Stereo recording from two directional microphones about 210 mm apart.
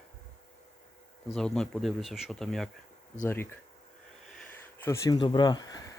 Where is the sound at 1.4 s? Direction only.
5° left (ahead or behind).